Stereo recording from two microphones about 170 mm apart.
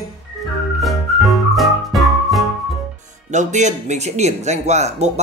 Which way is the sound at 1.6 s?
Centre (ahead or behind).